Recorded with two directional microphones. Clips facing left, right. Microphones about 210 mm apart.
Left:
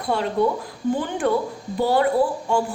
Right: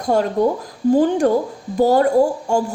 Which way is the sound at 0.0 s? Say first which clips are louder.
Right 4 dB; 45° right (ahead or behind).